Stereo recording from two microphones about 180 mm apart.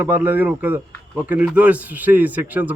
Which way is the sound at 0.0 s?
10° right (ahead or behind).